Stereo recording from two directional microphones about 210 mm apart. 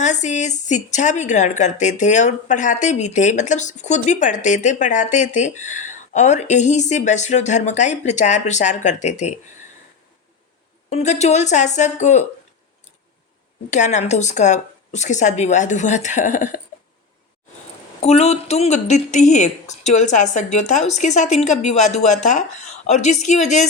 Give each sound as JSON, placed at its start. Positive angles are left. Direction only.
{"t": 0.0, "sound": "a woman's voice", "side_deg": 35}
{"t": 10.8, "sound": "a woman's voice", "side_deg": 35}
{"t": 13.7, "sound": "a woman's voice", "side_deg": 35}
{"t": 18.0, "sound": "a woman's voice", "side_deg": 30}